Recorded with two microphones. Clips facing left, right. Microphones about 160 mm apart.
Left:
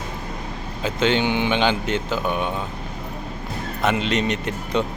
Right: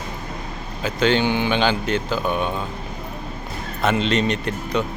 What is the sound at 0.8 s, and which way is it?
A man's voice, 25° left (ahead or behind).